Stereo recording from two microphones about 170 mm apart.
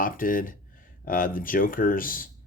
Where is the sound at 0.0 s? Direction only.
55° left (ahead or behind).